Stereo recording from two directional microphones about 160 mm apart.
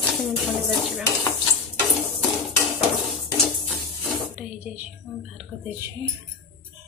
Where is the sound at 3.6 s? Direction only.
5° right (ahead or behind).